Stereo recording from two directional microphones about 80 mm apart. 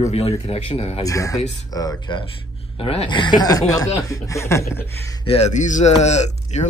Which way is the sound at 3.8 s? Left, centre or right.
Left.